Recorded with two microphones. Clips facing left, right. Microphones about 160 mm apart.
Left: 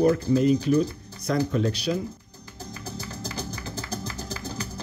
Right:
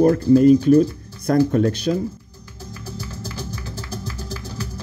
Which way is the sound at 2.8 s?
15° left (ahead or behind).